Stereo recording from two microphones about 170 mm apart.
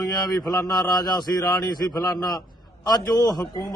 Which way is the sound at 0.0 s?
20° left (ahead or behind).